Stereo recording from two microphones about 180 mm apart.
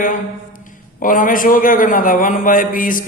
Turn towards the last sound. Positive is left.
turn(degrees=50)  # may be behind; listen again after turning